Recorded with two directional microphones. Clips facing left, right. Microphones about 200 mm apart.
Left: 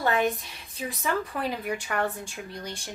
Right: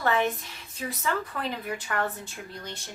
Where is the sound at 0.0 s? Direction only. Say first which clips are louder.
Left 1 dB; 15° left (ahead or behind).